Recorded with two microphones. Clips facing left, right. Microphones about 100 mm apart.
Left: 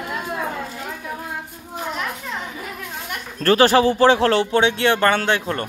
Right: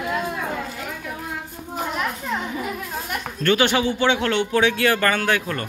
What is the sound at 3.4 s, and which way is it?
Speech, 35° left (ahead or behind).